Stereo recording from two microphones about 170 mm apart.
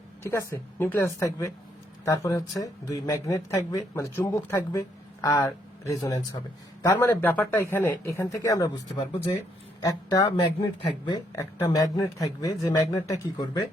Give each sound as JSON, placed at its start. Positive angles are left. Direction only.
{"t": 0.2, "sound": "speech", "side_deg": 15}